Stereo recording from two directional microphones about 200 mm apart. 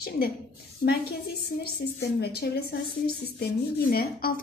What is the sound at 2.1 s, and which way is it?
Speech, 55° left (ahead or behind).